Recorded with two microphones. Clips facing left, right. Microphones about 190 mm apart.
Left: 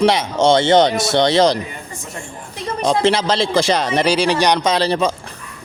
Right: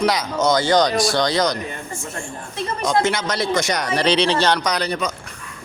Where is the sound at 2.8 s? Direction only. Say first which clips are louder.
Left 4 dB; 30° left (ahead or behind).